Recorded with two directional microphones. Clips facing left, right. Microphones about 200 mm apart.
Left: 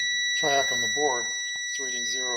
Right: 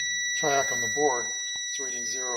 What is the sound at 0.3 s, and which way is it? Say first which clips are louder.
Speech: even; centre (ahead or behind).